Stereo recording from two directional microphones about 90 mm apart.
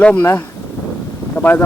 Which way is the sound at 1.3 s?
20° left (ahead or behind).